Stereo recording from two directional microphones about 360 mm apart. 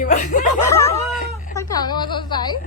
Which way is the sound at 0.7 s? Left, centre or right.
Centre.